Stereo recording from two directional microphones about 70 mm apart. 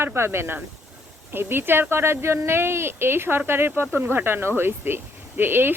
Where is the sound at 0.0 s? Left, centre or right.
Right.